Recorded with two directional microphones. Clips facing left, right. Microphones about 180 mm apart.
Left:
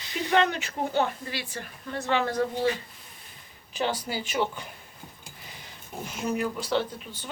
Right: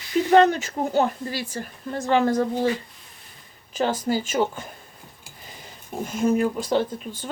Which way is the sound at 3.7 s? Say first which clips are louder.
Right 6 dB; 45° right (ahead or behind).